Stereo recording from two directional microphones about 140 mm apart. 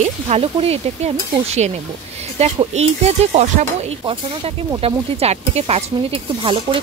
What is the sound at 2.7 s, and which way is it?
Speech, 50° right (ahead or behind).